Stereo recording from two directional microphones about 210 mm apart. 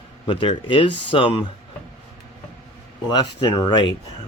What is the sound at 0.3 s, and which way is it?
Speech, 25° left (ahead or behind).